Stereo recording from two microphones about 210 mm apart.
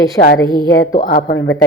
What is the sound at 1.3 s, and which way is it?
Speech, 60° left (ahead or behind).